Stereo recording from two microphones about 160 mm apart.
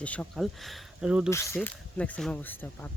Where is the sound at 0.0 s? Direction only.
5° left (ahead or behind).